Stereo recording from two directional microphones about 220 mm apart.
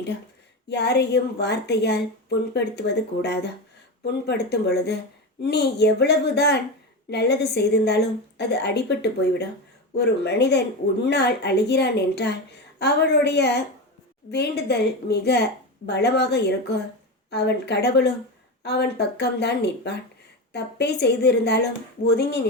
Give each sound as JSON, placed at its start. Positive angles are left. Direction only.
{"t": 0.7, "sound": "a woman's voice", "side_deg": 50}